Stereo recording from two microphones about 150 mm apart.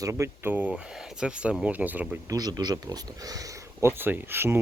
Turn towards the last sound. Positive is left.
turn(degrees=-15)  # may be behind; listen again after turning